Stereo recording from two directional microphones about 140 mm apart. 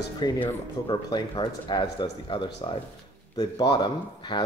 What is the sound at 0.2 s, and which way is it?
Speech, 30° left (ahead or behind).